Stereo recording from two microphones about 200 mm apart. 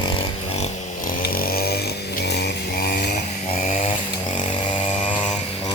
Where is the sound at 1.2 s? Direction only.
45° left (ahead or behind).